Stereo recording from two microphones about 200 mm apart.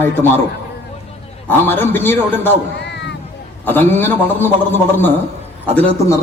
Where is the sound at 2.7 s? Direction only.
60° left (ahead or behind).